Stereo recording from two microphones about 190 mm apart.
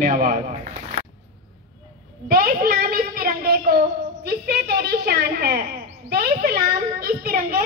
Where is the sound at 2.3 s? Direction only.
50° right (ahead or behind).